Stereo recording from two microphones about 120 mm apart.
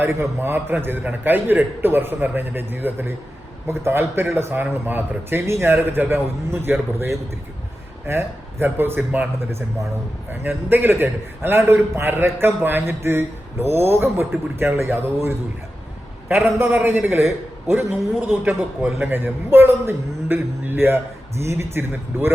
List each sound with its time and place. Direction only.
0.0 s a man's voice: 20° right (ahead or behind)
8.0 s a man's voice: 20° right (ahead or behind)
10.7 s a man's voice: 15° right (ahead or behind)